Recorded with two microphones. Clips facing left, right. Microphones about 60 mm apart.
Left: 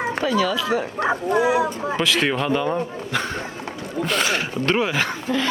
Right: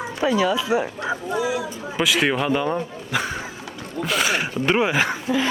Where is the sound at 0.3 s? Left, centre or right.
Centre.